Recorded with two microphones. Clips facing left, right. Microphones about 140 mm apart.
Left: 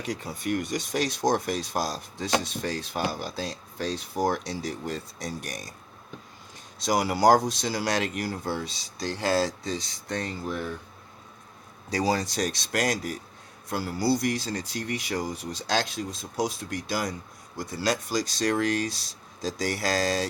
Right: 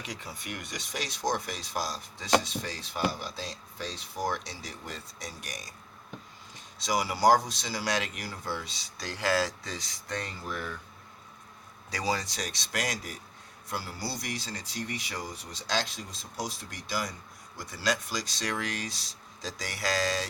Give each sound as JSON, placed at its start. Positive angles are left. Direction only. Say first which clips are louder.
{"t": 0.0, "sound": "speech", "louder": "left 9 dB", "side_deg": 45}
{"t": 6.8, "sound": "speech", "louder": "left 3 dB", "side_deg": 50}
{"t": 11.9, "sound": "speech", "louder": "left 6 dB", "side_deg": 40}